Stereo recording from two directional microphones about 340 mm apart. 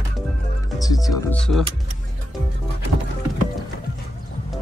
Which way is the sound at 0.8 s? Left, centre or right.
Centre.